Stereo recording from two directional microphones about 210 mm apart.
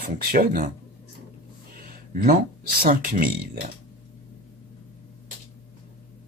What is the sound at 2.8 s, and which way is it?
Speech, 40° right (ahead or behind).